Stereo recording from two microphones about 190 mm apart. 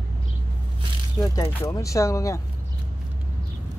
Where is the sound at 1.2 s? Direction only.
20° left (ahead or behind).